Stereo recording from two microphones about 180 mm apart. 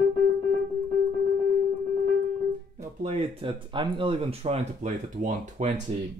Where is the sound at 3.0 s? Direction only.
30° right (ahead or behind).